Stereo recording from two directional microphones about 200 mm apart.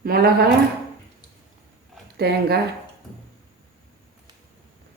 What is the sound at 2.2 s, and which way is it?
Speech, 55° right (ahead or behind).